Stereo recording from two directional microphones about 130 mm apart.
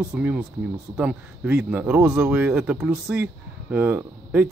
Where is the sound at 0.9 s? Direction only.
10° right (ahead or behind).